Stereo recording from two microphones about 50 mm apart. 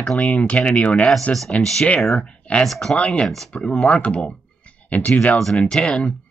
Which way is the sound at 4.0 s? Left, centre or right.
Left.